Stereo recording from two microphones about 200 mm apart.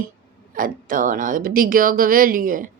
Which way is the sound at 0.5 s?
45° right (ahead or behind).